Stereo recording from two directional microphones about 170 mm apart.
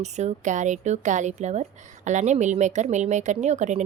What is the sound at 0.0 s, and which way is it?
Speech, 40° right (ahead or behind).